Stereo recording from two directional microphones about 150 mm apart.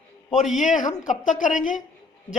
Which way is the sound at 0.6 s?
55° left (ahead or behind).